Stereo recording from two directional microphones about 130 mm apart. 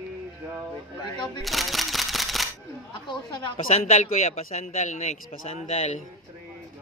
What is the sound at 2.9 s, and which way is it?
Speech, 40° left (ahead or behind).